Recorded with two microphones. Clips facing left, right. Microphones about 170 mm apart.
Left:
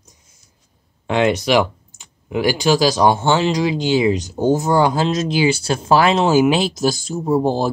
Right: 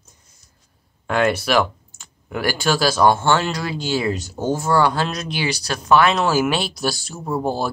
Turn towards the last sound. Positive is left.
turn(degrees=25)  # may be behind; listen again after turning